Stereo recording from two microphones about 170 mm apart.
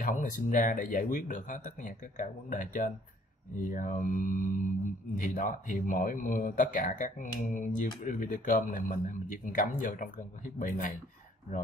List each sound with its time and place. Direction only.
0.0 s speech: 50° left (ahead or behind)